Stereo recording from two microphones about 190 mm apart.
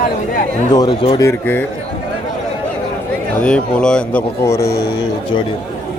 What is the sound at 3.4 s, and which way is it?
Speech, 5° left (ahead or behind).